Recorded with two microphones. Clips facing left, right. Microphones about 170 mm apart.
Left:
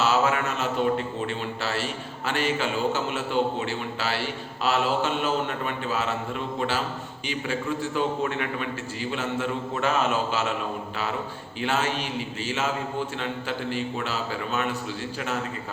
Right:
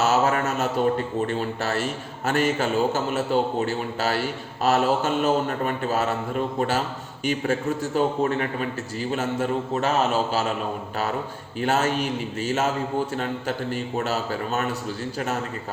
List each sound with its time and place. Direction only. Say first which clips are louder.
0.0 s a man's voice: right 2 dB; 45° right (ahead or behind)
11.6 s speech: right 4 dB; 45° right (ahead or behind)